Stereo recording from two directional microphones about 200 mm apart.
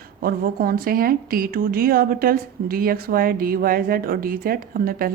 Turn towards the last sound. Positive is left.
turn(degrees=-45)  # may be behind; listen again after turning